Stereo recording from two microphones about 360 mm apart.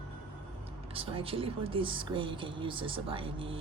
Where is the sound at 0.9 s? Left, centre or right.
Centre.